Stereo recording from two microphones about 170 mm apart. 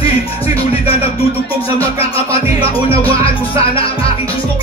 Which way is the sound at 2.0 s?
35° left (ahead or behind).